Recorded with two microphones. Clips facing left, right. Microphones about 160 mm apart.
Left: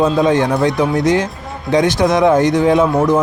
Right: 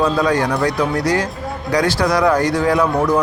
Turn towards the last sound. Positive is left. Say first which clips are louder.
# left 3 dB
turn(degrees=20)  # may be behind; listen again after turning